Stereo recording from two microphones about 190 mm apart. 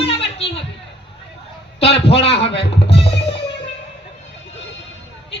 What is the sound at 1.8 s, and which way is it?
Speech, 30° left (ahead or behind).